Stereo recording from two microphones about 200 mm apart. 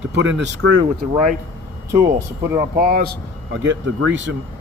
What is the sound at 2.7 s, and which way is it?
Speech, 45° right (ahead or behind).